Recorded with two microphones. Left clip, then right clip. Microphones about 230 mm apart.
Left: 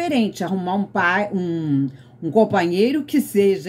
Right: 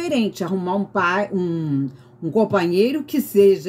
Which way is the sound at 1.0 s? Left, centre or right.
Centre.